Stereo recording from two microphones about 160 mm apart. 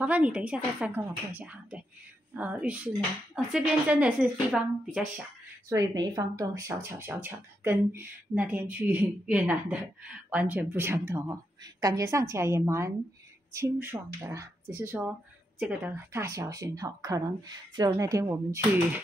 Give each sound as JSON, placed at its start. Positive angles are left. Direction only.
{"t": 0.0, "sound": "a woman's voice", "side_deg": -10}
{"t": 5.7, "sound": "speech", "side_deg": -20}